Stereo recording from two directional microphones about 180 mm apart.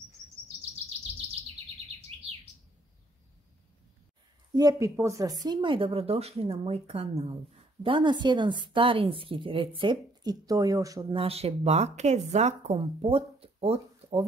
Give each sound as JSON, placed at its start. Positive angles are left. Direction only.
{"t": 2.1, "sound": "bird", "side_deg": -35}
{"t": 4.6, "sound": "speech", "side_deg": -20}